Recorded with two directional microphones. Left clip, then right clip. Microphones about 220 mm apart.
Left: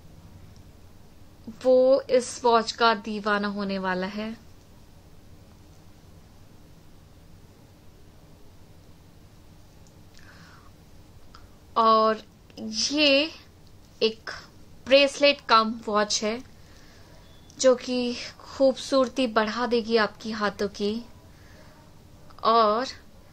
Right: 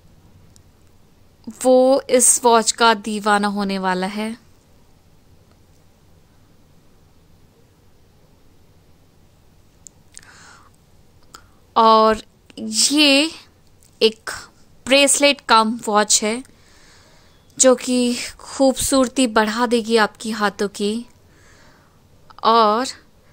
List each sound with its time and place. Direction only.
1.6 s speech: 45° right (ahead or behind)
10.1 s a sound: 50° right (ahead or behind)
13.9 s a woman's voice: 45° right (ahead or behind)
17.6 s speech: 45° right (ahead or behind)
22.3 s speech: 45° right (ahead or behind)